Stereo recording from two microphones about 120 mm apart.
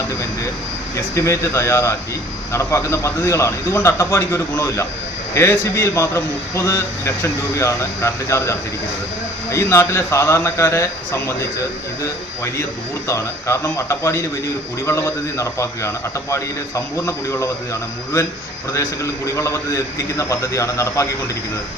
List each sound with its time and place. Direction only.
0.9 s a man's voice: 25° left (ahead or behind)
13.1 s a man's voice: 25° left (ahead or behind)
18.7 s a man's voice: 25° left (ahead or behind)